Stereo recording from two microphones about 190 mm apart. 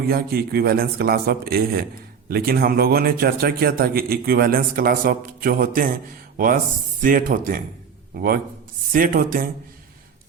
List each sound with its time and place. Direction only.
0.1 s a man's voice: 55° right (ahead or behind)